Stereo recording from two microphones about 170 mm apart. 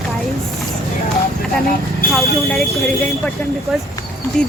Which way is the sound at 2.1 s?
Centre (ahead or behind).